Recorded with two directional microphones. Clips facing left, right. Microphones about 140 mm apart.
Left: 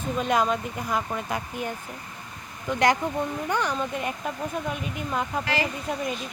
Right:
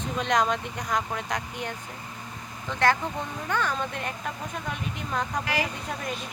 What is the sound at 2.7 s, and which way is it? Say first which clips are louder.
Speech: left 2 dB; 15° left (ahead or behind).